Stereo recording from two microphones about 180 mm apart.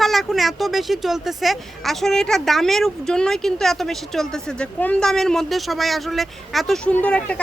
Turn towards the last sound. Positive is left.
turn(degrees=5)  # may be behind; listen again after turning